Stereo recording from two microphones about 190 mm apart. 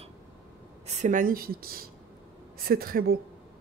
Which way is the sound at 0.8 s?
40° right (ahead or behind).